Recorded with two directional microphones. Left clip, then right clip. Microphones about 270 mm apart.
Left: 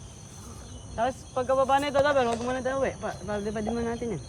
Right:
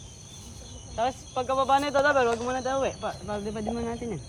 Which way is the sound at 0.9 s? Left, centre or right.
Centre.